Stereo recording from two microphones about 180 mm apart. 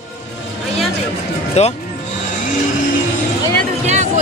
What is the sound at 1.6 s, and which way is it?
Speech, 35° left (ahead or behind).